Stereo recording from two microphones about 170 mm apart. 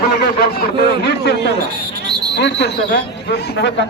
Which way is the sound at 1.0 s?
80° left.